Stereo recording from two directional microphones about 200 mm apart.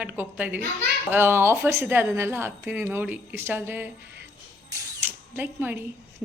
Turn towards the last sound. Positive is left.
turn(degrees=-10)  # may be behind; listen again after turning